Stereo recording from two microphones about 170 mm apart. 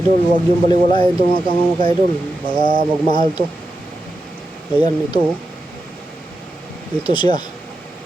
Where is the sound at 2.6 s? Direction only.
25° left (ahead or behind).